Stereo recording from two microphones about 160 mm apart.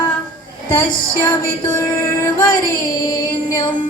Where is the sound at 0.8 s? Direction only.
20° left (ahead or behind).